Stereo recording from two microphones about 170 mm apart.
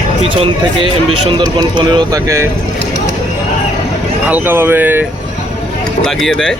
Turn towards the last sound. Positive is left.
turn(degrees=5)  # may be behind; listen again after turning